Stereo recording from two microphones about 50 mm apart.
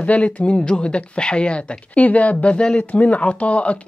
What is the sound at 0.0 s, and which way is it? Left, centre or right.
Speech, left.